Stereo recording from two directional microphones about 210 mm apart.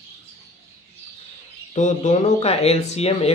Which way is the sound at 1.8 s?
35° left (ahead or behind).